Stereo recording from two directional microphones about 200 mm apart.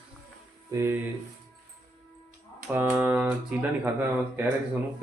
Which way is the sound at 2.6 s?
10° right (ahead or behind).